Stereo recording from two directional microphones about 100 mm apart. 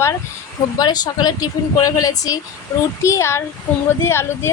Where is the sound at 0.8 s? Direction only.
40° left (ahead or behind).